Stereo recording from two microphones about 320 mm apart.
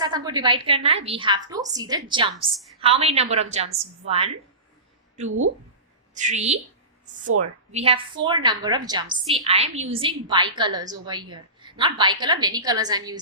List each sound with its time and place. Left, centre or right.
0.0 s a woman's voice: centre
6.1 s a woman's voice: right
7.7 s a woman's voice: centre